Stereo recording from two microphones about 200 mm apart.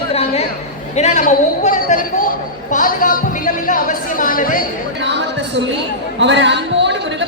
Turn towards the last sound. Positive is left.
turn(degrees=-60)  # may be behind; listen again after turning